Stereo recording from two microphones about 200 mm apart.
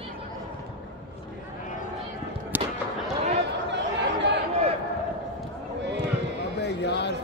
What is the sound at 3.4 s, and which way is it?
Chatter, 60° right (ahead or behind).